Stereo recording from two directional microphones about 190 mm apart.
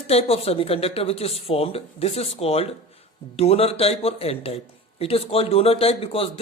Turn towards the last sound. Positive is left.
turn(degrees=30)  # may be behind; listen again after turning